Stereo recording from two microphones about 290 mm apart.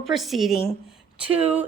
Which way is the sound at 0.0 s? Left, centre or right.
Centre.